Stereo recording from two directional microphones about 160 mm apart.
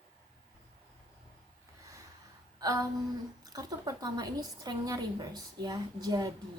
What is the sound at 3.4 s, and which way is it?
A woman's voice, 25° right (ahead or behind).